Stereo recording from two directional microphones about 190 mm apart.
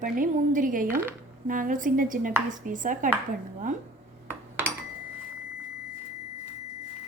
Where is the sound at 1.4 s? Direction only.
45° right (ahead or behind).